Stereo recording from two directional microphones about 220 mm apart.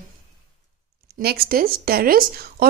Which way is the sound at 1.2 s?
45° right (ahead or behind).